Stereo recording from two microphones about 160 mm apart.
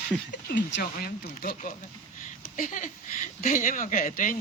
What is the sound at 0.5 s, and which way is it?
Speech, 80° left.